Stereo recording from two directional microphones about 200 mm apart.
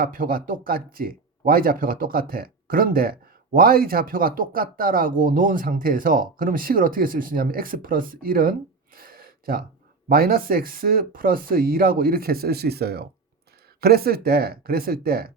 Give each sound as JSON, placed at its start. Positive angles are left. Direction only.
{"t": 0.0, "sound": "speech", "side_deg": -45}
{"t": 9.0, "sound": "gasp", "side_deg": -45}
{"t": 10.1, "sound": "speech", "side_deg": -50}